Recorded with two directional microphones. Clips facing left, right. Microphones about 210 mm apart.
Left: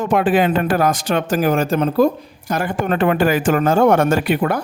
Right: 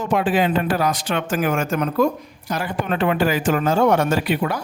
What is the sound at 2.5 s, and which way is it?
A man's voice, 50° left (ahead or behind).